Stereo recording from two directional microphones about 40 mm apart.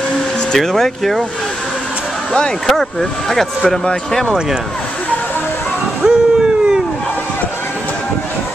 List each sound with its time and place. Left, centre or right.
0.6 s speech: centre
2.6 s speech: centre
6.0 s dog: right